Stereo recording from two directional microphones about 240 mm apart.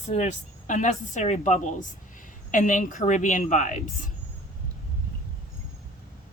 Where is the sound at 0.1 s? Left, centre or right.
Left.